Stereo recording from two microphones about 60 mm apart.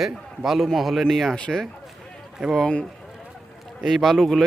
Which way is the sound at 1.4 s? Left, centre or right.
Centre.